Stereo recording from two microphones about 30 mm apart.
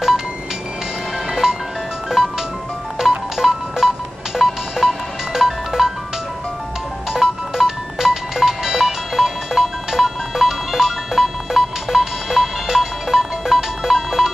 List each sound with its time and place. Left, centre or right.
2.1 s music: centre
7.1 s music: centre